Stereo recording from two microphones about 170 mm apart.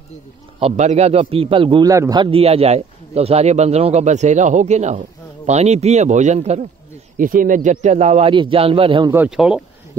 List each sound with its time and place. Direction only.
0.6 s a man's voice: 40° right (ahead or behind)
1.9 s a man's voice: 20° right (ahead or behind); by 6.6 s 40° right (ahead or behind)
7.2 s a man's voice: 55° right (ahead or behind); by 9.1 s 30° right (ahead or behind)
9.1 s speech: 5° right (ahead or behind)